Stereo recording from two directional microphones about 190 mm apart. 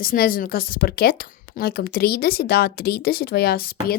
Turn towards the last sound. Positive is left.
turn(degrees=50)  # may be behind; listen again after turning